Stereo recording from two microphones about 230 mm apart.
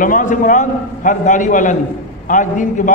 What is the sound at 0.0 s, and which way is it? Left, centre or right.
A man's voice, left.